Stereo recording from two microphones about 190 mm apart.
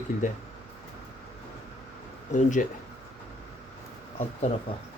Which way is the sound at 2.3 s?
40° left (ahead or behind).